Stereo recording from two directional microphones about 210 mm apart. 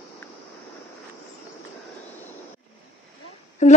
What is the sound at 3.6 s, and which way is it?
Humming, 35° left (ahead or behind).